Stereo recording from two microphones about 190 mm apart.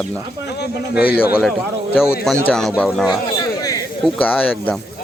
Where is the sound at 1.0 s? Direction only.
55° left (ahead or behind).